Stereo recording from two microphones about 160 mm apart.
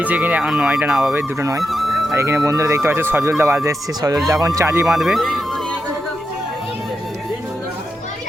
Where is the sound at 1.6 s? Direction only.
Centre (ahead or behind).